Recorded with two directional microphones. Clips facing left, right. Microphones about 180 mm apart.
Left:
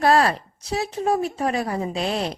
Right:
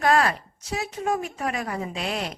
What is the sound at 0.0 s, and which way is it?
A woman's voice, 30° left (ahead or behind).